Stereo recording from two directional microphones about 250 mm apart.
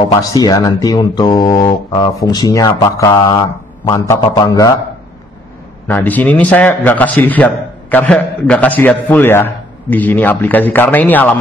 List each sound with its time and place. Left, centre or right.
0.0 s a man's voice: centre
5.9 s a man's voice: centre